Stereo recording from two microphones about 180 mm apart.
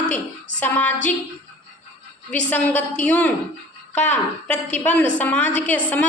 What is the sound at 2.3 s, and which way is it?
A woman's voice, 10° left (ahead or behind).